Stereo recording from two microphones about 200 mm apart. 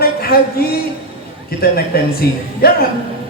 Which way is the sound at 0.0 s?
50° left (ahead or behind).